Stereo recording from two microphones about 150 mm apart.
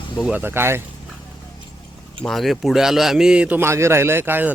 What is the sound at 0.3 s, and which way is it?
Speech, 15° right (ahead or behind).